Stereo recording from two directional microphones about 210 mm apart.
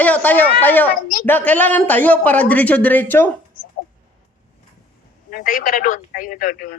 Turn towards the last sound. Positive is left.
turn(degrees=40)  # may be behind; listen again after turning